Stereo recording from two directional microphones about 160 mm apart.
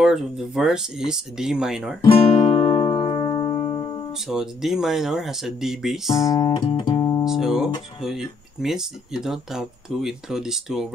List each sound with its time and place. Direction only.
0.0 s speech: centre (ahead or behind)
2.0 s music: 35° left (ahead or behind)
4.1 s speech: 5° right (ahead or behind)
6.3 s music: 25° left (ahead or behind)
7.2 s speech: centre (ahead or behind)